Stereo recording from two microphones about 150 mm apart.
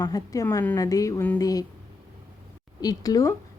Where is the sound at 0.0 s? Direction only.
25° left (ahead or behind).